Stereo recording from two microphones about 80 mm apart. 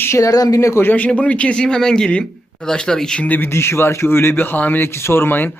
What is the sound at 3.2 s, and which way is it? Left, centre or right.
Speech, left.